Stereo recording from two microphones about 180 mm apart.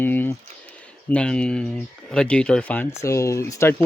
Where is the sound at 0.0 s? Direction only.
10° left (ahead or behind).